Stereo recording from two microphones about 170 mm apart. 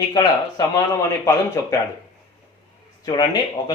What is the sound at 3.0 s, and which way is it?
Speech, 25° left (ahead or behind).